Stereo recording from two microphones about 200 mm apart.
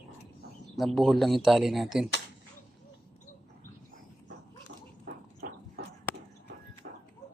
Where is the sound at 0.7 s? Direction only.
Centre (ahead or behind).